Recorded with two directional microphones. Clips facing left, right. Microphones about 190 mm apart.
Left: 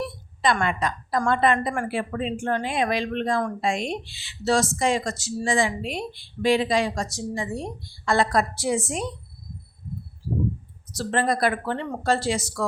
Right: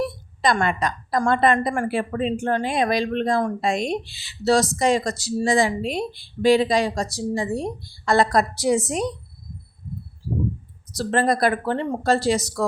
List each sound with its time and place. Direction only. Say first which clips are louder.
0.0 s a sound: right 3 dB; 40° right (ahead or behind)
1.2 s speech: right 3 dB; 40° right (ahead or behind)
10.9 s speech: right 3 dB; 40° right (ahead or behind)